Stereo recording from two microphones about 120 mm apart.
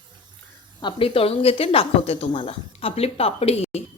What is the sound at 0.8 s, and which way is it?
A woman's voice, 45° left (ahead or behind).